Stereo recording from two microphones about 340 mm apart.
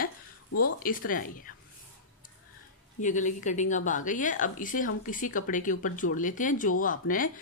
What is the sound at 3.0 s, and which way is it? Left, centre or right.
Speech, left.